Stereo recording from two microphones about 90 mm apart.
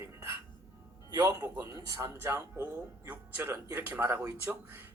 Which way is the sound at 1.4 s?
20° right (ahead or behind).